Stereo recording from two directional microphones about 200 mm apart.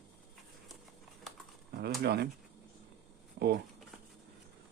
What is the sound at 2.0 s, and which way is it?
Speech, 55° right (ahead or behind).